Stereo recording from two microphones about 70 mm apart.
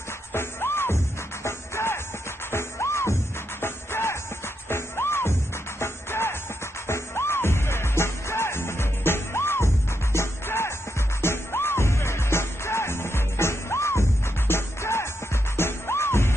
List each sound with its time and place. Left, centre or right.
0.3 s music: left